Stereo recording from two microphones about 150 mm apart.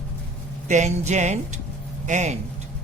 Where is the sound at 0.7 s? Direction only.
50° right (ahead or behind).